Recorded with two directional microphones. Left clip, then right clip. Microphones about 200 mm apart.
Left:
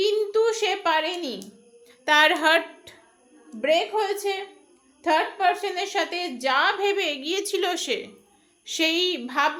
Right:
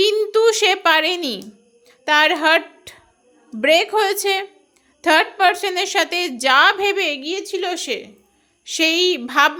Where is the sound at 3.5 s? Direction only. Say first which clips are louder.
Right 7 dB; 40° right (ahead or behind).